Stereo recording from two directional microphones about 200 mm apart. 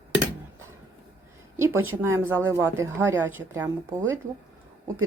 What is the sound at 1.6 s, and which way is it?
Speech, 10° right (ahead or behind).